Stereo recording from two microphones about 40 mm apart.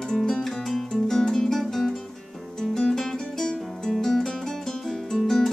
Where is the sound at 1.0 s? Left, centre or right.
Centre.